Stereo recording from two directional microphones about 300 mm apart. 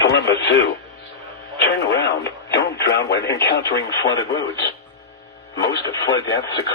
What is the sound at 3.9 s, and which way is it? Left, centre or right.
Speech, centre.